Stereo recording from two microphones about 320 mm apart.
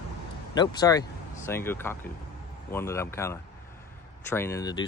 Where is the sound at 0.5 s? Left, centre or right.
Centre.